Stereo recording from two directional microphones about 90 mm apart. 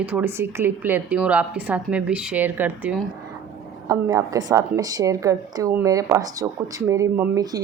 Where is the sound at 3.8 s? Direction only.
45° right (ahead or behind).